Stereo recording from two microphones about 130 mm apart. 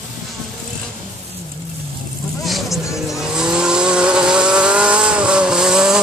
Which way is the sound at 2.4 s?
Centre (ahead or behind).